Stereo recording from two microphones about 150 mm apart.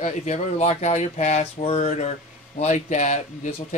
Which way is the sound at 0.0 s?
55° left (ahead or behind).